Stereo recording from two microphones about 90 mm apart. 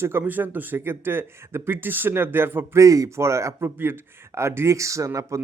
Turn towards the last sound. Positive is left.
turn(degrees=-35)  # may be behind; listen again after turning